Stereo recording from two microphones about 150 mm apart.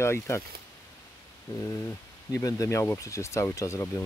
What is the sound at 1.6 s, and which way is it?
Speech, 20° left (ahead or behind).